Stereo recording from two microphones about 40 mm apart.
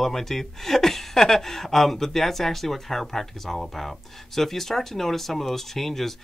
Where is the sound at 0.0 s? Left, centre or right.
Centre.